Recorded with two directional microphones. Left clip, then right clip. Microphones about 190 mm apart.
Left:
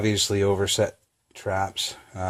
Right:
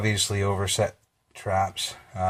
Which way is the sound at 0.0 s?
50° left (ahead or behind).